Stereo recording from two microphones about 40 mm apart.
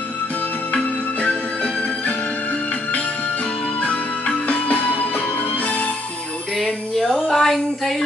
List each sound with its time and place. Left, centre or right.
1.2 s music: left
4.5 s music: left
6.5 s music: centre
7.2 s a sound: centre